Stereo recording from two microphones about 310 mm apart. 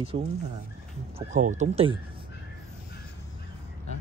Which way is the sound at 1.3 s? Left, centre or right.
Right.